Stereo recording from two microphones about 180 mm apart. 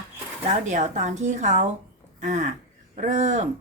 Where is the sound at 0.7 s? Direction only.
40° right (ahead or behind).